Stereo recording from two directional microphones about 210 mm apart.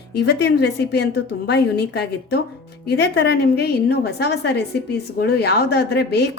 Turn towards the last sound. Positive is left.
turn(degrees=50)  # may be behind; listen again after turning